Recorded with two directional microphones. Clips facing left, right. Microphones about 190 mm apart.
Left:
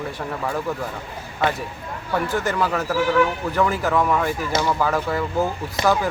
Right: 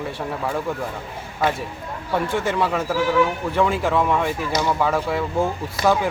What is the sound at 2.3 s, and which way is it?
Speech, 25° right (ahead or behind).